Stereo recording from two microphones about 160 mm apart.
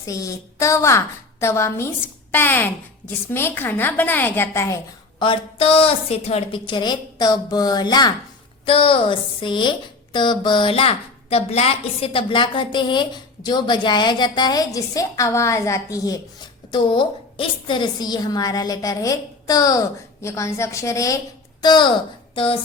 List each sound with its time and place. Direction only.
0.0 s a woman's voice: 20° left (ahead or behind)
5.2 s speech: 35° left (ahead or behind)